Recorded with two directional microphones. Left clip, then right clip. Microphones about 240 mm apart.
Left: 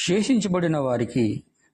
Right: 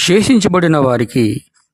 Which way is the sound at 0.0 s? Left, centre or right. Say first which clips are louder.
Right 11 dB; right.